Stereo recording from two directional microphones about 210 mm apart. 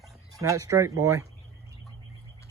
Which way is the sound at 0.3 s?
15° right (ahead or behind).